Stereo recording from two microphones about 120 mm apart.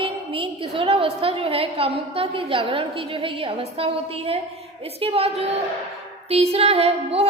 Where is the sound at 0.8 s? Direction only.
55° right (ahead or behind).